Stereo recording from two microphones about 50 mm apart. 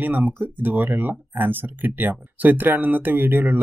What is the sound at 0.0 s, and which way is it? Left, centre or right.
Speech, right.